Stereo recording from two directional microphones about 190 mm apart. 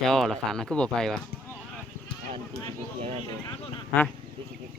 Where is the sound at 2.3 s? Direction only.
30° right (ahead or behind).